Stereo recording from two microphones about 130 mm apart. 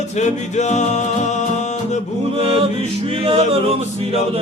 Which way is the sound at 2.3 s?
45° right (ahead or behind).